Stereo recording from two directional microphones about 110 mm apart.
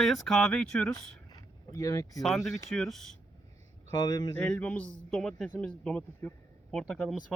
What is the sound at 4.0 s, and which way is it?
Speech, 40° left (ahead or behind).